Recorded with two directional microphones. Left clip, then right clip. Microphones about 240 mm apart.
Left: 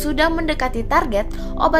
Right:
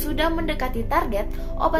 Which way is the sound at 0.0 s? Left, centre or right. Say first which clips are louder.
Left 5 dB; left.